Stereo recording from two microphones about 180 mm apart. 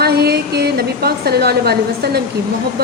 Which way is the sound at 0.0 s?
60° right (ahead or behind).